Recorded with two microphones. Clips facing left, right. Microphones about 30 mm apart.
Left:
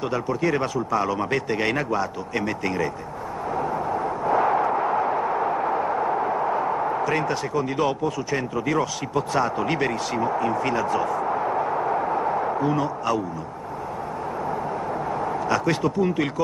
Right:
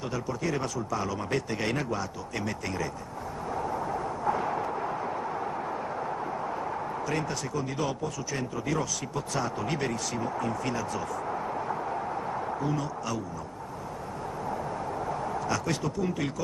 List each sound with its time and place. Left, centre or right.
0.1 s a man's voice: left
3.5 s a sound: left
15.0 s speech: left